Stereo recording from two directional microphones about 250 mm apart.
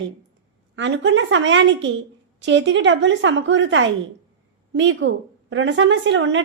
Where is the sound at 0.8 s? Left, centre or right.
Right.